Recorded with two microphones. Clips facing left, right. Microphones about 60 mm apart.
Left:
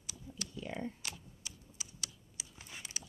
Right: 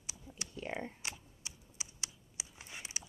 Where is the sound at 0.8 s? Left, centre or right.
Right.